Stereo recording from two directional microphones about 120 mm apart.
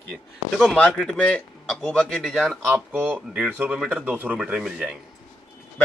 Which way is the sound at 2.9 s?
10° right (ahead or behind).